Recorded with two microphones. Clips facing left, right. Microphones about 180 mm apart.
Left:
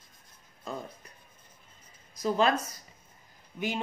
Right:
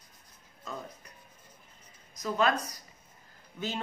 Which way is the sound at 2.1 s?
30° left (ahead or behind).